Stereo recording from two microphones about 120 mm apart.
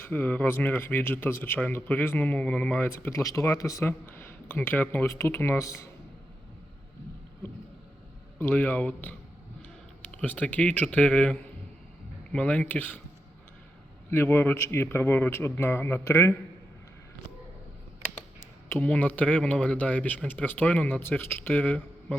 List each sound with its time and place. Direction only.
0.0 s a man's voice: 15° left (ahead or behind)
8.4 s speech: 15° left (ahead or behind)
14.1 s a man's voice: 20° left (ahead or behind)
18.7 s speech: 15° left (ahead or behind)